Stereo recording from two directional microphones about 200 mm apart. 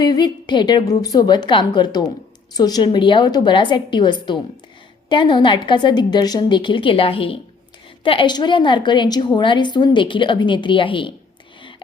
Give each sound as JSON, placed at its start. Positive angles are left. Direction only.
{"t": 0.0, "sound": "a woman's voice", "side_deg": 20}